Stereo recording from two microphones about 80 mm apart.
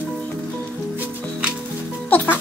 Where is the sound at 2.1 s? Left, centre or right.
Left.